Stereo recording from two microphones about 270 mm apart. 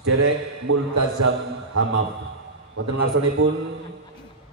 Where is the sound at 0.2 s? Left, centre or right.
Right.